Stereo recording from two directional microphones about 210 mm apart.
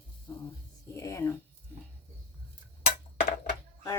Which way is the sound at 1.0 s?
15° left (ahead or behind).